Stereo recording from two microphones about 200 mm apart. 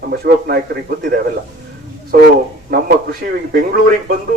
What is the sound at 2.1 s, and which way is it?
A man's voice, 45° right (ahead or behind).